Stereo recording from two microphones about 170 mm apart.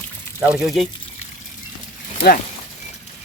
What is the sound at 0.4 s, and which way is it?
Speech, 5° right (ahead or behind).